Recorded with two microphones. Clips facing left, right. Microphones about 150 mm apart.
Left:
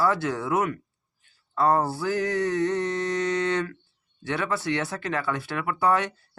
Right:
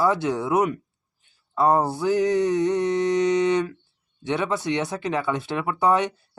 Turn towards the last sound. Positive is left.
turn(degrees=-20)  # may be behind; listen again after turning